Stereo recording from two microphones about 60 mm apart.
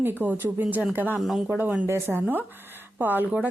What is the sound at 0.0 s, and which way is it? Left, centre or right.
A woman's voice, right.